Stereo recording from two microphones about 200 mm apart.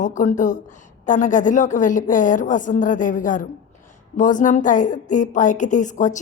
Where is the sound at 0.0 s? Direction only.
40° left (ahead or behind).